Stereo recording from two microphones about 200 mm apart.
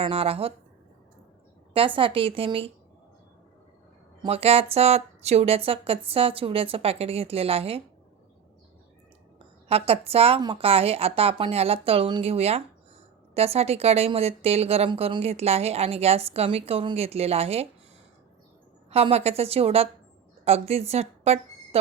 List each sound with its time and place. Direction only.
0.0 s speech: 30° right (ahead or behind)
1.7 s speech: 25° right (ahead or behind)
4.2 s speech: 30° right (ahead or behind)
9.6 s a woman's voice: 30° right (ahead or behind)
18.9 s a woman's voice: 30° right (ahead or behind)